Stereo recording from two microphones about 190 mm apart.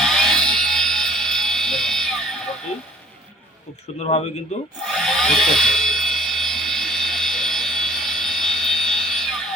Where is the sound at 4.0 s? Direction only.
35° left (ahead or behind).